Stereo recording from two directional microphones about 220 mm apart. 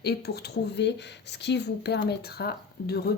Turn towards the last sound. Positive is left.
turn(degrees=45)  # may be behind; listen again after turning